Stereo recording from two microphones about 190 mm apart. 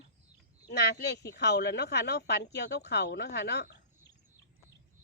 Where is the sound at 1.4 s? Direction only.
65° left (ahead or behind).